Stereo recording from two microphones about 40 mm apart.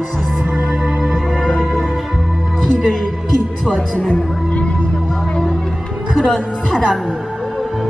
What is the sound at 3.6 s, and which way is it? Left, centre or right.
Speech, centre.